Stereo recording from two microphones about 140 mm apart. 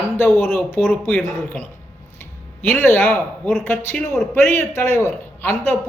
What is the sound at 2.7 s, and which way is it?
A man's voice, 15° left (ahead or behind).